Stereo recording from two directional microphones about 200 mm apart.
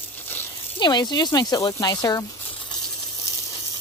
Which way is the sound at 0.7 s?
20° left (ahead or behind).